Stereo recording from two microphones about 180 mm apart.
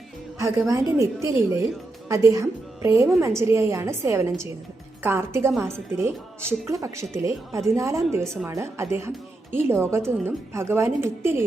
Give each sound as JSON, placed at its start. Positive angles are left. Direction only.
{"t": 0.7, "sound": "a woman's voice", "side_deg": -20}